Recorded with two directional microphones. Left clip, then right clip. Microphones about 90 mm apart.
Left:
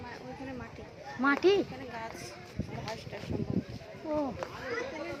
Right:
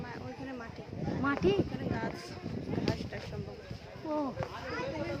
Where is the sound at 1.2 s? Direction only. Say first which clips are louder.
Left 4 dB; 40° left (ahead or behind).